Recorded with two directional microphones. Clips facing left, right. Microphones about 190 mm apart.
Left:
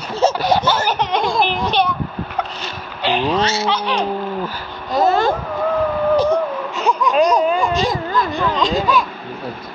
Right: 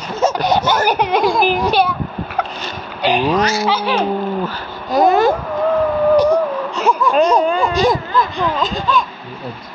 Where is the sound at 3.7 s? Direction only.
5° right (ahead or behind).